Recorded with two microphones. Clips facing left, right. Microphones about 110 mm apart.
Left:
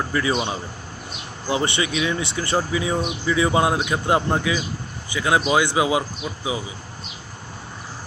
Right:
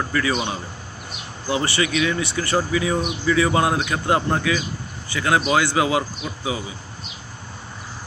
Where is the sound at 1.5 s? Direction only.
25° left (ahead or behind).